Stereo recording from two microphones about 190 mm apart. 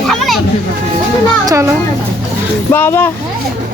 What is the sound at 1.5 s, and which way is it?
Speech, 15° right (ahead or behind).